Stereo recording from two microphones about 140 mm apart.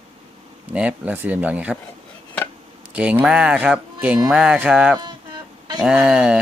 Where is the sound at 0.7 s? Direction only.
10° right (ahead or behind).